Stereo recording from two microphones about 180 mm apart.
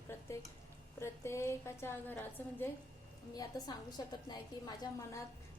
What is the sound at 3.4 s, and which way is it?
A woman's voice, 25° left (ahead or behind).